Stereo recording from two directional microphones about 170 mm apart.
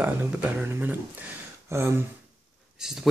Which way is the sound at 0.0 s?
10° right (ahead or behind).